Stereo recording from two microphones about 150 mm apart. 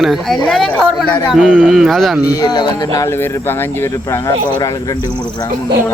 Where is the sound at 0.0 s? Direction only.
Centre (ahead or behind).